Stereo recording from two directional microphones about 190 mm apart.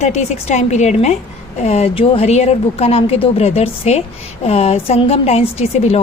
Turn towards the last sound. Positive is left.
turn(degrees=35)  # may be behind; listen again after turning